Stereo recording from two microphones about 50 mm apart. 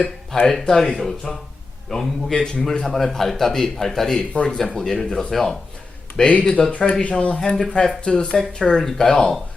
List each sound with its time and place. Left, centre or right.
0.3 s a man's voice: centre
2.3 s speech: centre
2.6 s a man's voice: centre
6.1 s a man's voice: left; by 9.4 s centre